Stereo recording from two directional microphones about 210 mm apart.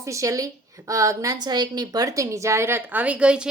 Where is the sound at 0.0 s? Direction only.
15° right (ahead or behind).